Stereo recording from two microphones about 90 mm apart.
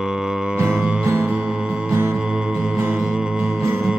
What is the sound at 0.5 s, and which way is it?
Music, 20° right (ahead or behind).